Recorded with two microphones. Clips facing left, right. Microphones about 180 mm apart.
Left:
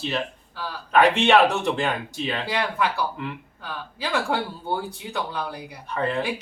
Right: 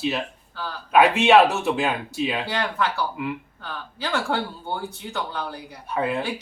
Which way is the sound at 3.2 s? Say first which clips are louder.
Right 4 dB; 10° right (ahead or behind).